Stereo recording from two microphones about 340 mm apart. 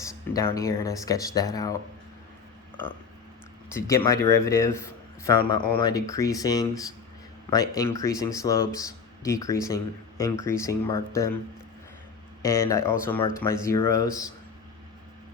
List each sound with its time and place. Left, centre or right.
0.1 s a man's voice: centre
3.8 s a man's voice: centre
12.4 s a man's voice: centre